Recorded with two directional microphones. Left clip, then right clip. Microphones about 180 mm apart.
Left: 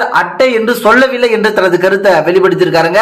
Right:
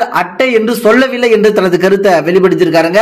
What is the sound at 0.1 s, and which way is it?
A man's voice, 45° right (ahead or behind).